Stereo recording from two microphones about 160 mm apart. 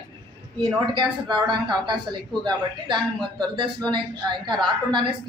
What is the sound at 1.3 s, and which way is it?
A woman's voice, 30° right (ahead or behind).